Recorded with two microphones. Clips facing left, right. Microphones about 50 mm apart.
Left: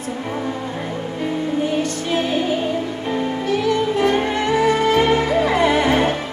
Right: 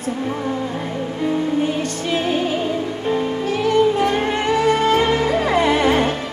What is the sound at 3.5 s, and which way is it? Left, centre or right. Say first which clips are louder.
Music: right 3 dB; right.